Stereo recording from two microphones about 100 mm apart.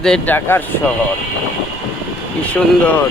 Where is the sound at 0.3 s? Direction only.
20° left (ahead or behind).